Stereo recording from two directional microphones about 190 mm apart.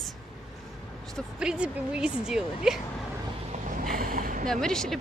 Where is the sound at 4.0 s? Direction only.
45° right (ahead or behind).